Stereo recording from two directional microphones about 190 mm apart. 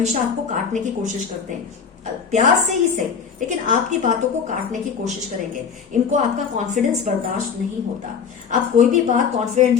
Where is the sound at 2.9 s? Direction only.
40° right (ahead or behind).